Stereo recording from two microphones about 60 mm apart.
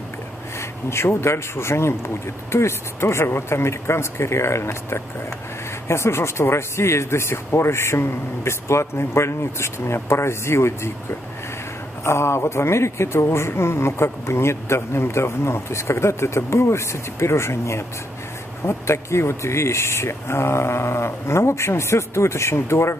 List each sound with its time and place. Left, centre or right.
0.6 s speech: left